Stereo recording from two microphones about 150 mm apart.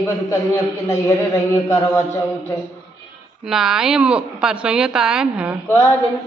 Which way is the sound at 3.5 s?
5° right (ahead or behind).